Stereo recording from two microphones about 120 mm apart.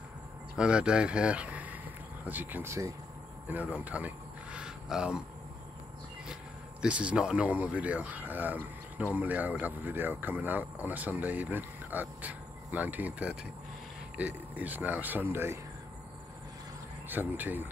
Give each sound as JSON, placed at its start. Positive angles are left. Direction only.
{"t": 0.6, "sound": "speech", "side_deg": -10}
{"t": 3.4, "sound": "a sound", "side_deg": -10}
{"t": 6.8, "sound": "speech", "side_deg": -10}
{"t": 17.1, "sound": "speech", "side_deg": -15}